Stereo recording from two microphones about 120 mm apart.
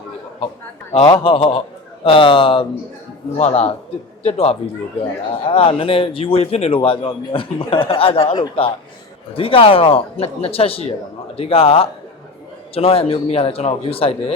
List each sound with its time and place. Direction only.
1.0 s a man's voice: 45° left (ahead or behind)
3.3 s a man's voice: 60° left (ahead or behind)